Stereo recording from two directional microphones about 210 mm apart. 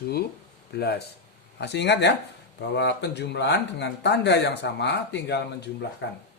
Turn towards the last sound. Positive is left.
turn(degrees=55)  # may be behind; listen again after turning